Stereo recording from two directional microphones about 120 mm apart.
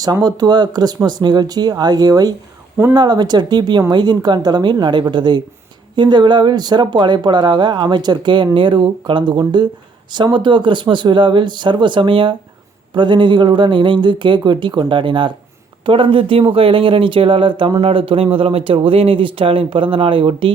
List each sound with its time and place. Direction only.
0.0 s speech: 30° right (ahead or behind); by 20.5 s 45° right (ahead or behind)